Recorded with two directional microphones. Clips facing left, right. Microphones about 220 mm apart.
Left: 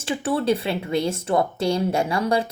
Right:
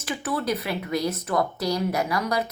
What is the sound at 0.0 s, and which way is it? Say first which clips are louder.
A woman's voice: left 5 dB; 30° left (ahead or behind).